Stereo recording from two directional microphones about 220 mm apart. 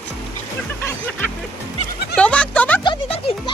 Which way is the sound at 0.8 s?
10° left (ahead or behind).